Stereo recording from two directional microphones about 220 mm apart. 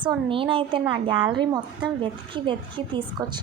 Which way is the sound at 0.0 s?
25° right (ahead or behind).